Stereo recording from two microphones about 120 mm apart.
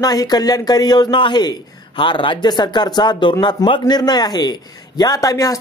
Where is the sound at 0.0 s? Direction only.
30° left (ahead or behind).